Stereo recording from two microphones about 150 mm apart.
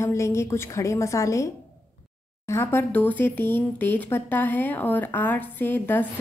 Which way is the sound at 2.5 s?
15° left (ahead or behind).